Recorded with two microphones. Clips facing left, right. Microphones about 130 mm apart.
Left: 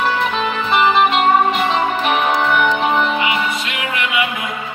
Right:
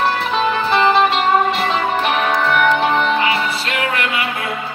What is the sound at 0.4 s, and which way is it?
Music, 35° right (ahead or behind).